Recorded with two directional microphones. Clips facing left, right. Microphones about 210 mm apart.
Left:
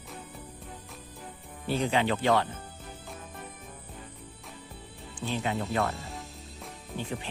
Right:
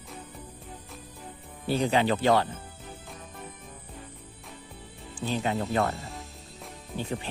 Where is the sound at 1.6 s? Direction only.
35° right (ahead or behind).